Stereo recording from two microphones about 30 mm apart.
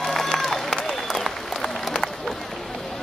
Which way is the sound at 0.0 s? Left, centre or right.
Centre.